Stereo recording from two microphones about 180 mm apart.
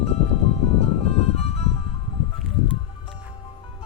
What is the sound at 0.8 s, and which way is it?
Music, 35° left (ahead or behind).